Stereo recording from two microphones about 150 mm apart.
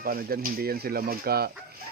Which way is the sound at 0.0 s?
80° right.